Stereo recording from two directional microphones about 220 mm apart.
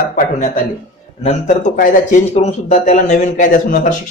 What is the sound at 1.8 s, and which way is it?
Speech, 35° left (ahead or behind).